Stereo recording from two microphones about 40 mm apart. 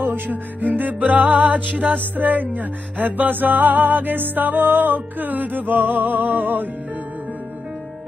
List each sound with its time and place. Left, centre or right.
0.0 s music: right
0.9 s music: right